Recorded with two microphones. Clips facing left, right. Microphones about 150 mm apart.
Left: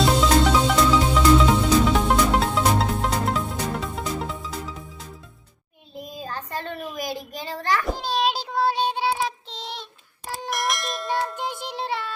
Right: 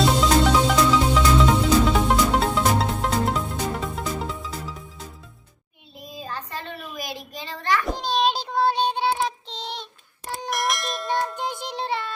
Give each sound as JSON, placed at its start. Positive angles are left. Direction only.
{"t": 0.0, "sound": "music", "side_deg": 0}
{"t": 6.2, "sound": "child singing", "side_deg": 40}
{"t": 7.9, "sound": "child singing", "side_deg": 5}
{"t": 10.2, "sound": "music", "side_deg": 0}